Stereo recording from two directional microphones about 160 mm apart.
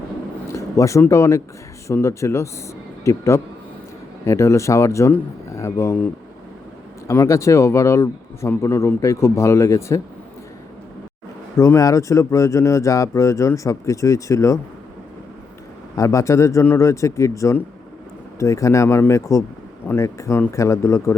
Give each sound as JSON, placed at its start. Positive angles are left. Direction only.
{"t": 0.4, "sound": "speech", "side_deg": 20}
{"t": 7.1, "sound": "speech", "side_deg": 20}
{"t": 11.5, "sound": "speech", "side_deg": 20}
{"t": 16.0, "sound": "speech", "side_deg": 20}